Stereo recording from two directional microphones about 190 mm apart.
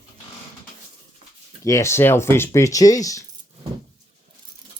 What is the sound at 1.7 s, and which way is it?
Speech, 15° left (ahead or behind).